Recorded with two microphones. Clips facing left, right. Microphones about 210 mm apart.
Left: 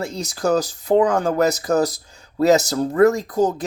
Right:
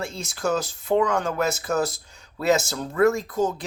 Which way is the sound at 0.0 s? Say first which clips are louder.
Left 5 dB; 40° left (ahead or behind).